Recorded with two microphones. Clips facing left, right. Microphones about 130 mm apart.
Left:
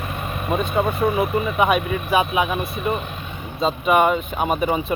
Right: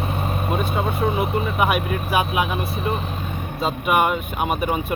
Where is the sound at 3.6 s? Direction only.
5° right (ahead or behind).